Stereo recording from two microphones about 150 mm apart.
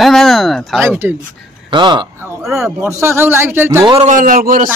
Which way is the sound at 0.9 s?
15° right (ahead or behind).